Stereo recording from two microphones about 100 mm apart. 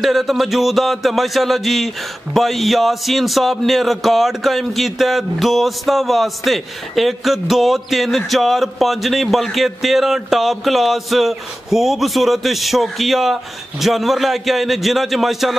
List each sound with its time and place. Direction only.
0.0 s a man's voice: centre (ahead or behind)